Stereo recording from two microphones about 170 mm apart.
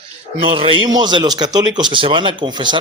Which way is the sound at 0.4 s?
30° right (ahead or behind).